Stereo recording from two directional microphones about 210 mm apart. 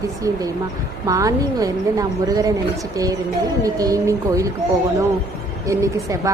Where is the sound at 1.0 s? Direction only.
15° right (ahead or behind).